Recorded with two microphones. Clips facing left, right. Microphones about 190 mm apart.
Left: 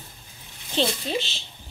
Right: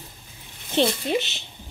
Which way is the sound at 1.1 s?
20° right (ahead or behind).